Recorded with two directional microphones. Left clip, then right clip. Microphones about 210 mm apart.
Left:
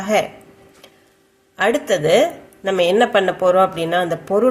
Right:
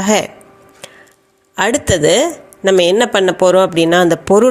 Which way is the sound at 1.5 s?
40° right (ahead or behind).